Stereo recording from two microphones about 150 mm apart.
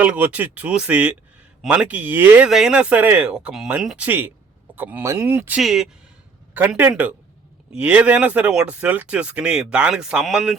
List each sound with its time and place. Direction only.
0.0 s speech: 10° right (ahead or behind)